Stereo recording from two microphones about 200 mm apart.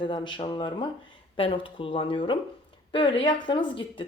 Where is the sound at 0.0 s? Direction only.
25° left (ahead or behind).